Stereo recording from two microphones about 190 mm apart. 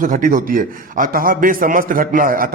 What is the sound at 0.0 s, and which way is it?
Speech, 45° right (ahead or behind).